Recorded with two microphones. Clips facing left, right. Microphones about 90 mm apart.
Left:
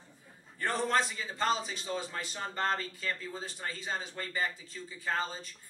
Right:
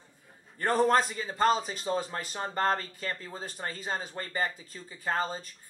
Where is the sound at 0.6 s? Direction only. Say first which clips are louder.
Right 6 dB; 45° right (ahead or behind).